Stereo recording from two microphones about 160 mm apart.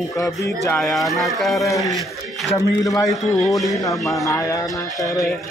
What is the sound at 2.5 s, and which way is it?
Speech, 20° left (ahead or behind).